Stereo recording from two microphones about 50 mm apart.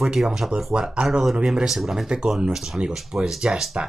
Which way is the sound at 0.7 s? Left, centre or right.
Centre.